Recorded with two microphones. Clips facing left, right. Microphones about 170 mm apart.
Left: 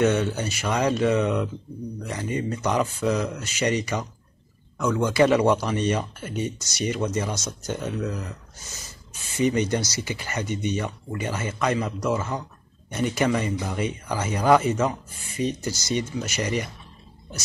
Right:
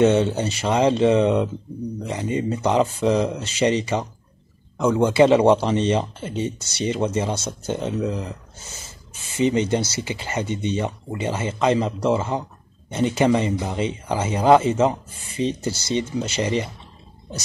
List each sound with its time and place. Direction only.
0.0 s speech: 25° right (ahead or behind)
4.9 s speech: 25° right (ahead or behind)
9.4 s speech: 25° right (ahead or behind)